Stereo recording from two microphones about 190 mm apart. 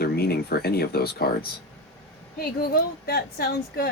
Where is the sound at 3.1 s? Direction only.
55° left (ahead or behind).